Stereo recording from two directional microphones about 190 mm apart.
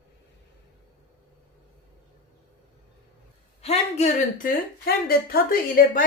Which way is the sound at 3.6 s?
35° left (ahead or behind).